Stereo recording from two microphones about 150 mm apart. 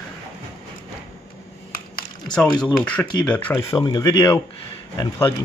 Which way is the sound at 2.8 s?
10° left (ahead or behind).